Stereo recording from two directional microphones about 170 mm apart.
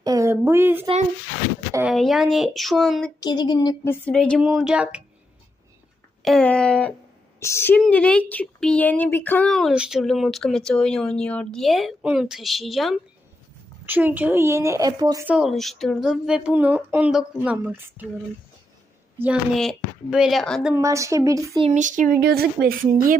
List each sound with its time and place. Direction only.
0.0 s a sound: 20° right (ahead or behind)
1.9 s speech: centre (ahead or behind)
3.2 s speech: 25° left (ahead or behind)
3.8 s speech: 5° left (ahead or behind)
6.2 s speech: 5° left (ahead or behind)
7.3 s speech: 15° left (ahead or behind); by 15.3 s 20° right (ahead or behind)
15.3 s speech: centre (ahead or behind)
19.2 s speech: 5° right (ahead or behind)
20.7 s a woman's voice: 20° right (ahead or behind)
21.8 s speech: 50° right (ahead or behind)